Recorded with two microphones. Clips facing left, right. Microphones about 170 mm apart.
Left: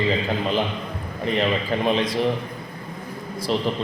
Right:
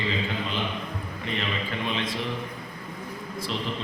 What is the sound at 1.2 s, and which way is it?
Speech, 40° left (ahead or behind).